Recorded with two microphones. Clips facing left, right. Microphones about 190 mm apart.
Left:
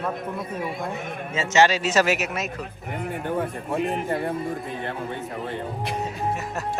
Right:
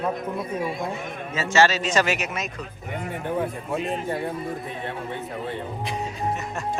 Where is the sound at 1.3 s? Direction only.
25° left (ahead or behind); by 3.8 s centre (ahead or behind).